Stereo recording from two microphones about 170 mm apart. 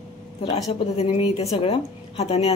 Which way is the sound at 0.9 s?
35° left (ahead or behind).